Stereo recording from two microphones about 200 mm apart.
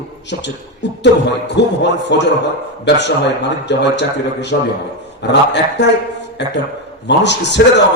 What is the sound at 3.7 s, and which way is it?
Speech, 60° left (ahead or behind).